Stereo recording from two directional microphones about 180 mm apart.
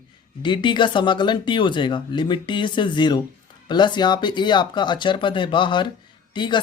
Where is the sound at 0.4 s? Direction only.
25° left (ahead or behind).